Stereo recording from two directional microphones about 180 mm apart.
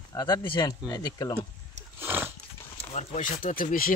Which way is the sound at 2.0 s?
10° right (ahead or behind).